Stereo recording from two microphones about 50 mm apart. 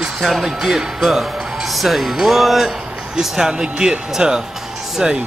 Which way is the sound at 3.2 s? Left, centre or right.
Centre.